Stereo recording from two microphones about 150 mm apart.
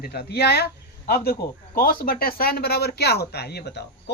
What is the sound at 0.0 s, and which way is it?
Speech, 90° left.